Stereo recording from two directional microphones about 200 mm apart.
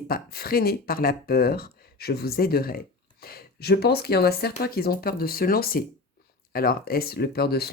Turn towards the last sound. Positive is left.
turn(degrees=55)  # may be behind; listen again after turning